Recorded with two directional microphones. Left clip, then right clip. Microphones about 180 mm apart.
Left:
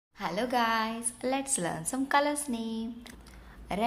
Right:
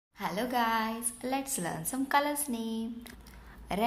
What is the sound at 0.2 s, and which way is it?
A woman's voice, 10° left (ahead or behind).